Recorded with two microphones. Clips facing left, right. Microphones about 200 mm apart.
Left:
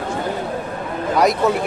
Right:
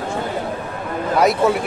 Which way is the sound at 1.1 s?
Centre (ahead or behind).